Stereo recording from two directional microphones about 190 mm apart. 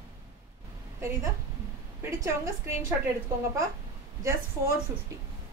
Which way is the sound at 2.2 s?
15° right (ahead or behind).